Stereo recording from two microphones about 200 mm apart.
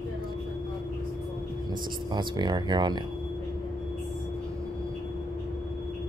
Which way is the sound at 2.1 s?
20° right (ahead or behind).